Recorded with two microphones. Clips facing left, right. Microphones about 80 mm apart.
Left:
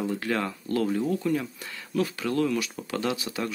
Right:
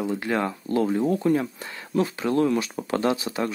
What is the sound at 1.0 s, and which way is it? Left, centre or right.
Speech, right.